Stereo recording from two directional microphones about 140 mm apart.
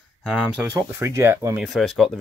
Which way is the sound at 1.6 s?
Centre (ahead or behind).